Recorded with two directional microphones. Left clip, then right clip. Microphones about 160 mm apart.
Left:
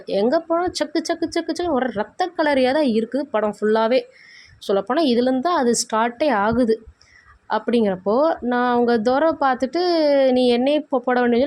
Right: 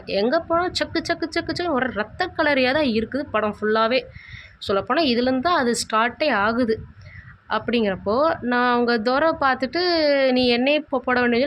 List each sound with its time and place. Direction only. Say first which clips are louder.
0.1 s speech: left 1 dB; 40° left (ahead or behind)